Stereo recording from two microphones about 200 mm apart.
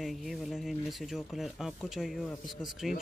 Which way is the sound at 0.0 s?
Centre (ahead or behind).